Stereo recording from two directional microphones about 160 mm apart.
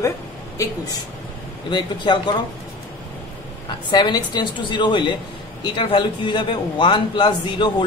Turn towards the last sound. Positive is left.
turn(degrees=30)  # may be behind; listen again after turning